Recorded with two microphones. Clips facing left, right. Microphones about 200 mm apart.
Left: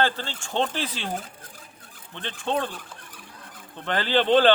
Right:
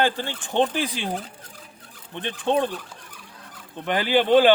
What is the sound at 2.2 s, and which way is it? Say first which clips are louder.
Speech: right 5 dB; 15° right (ahead or behind).